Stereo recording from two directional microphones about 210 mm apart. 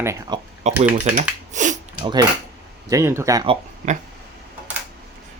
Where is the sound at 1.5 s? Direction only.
35° right (ahead or behind).